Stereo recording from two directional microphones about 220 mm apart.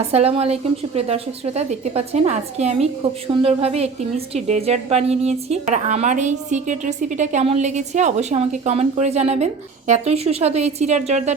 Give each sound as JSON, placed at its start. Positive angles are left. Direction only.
{"t": 0.1, "sound": "a woman's voice", "side_deg": -25}